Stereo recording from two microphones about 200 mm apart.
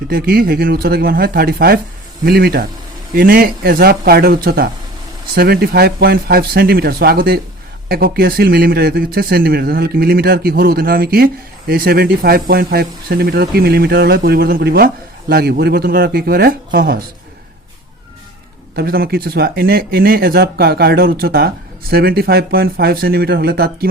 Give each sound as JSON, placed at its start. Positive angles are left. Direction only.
{"t": 0.1, "sound": "speech", "side_deg": -50}
{"t": 18.8, "sound": "speech", "side_deg": -50}